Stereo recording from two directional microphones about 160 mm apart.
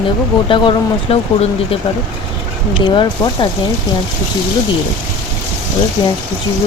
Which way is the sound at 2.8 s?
30° left (ahead or behind).